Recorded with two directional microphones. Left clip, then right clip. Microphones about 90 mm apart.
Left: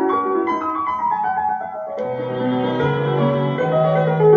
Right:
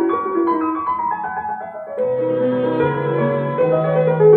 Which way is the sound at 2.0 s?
30° left (ahead or behind).